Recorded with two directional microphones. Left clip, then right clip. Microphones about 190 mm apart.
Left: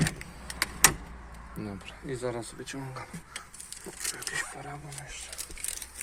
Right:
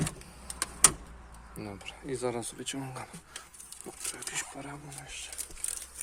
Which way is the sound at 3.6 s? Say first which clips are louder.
Left 4 dB; 35° right (ahead or behind).